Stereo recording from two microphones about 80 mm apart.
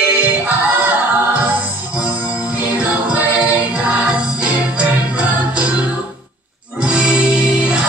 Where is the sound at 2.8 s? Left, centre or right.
Right.